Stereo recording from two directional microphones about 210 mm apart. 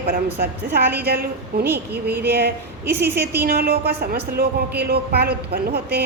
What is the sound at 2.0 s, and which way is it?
Speech, 50° right (ahead or behind).